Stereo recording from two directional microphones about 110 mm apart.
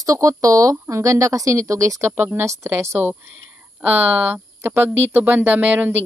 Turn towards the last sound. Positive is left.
turn(degrees=-15)  # may be behind; listen again after turning